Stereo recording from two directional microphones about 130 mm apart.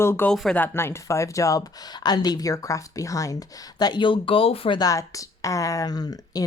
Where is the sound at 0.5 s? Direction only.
15° left (ahead or behind); by 4.7 s 45° left (ahead or behind).